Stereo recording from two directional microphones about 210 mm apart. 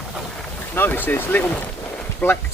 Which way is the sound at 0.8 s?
10° left (ahead or behind).